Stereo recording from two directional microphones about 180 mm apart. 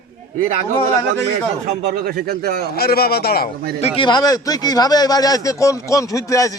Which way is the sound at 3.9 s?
25° left (ahead or behind).